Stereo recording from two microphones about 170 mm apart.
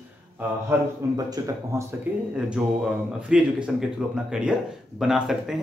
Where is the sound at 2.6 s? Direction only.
5° right (ahead or behind).